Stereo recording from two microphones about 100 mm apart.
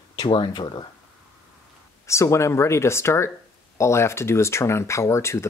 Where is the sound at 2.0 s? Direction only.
30° left (ahead or behind).